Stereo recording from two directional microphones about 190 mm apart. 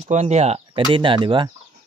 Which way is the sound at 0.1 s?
35° right (ahead or behind).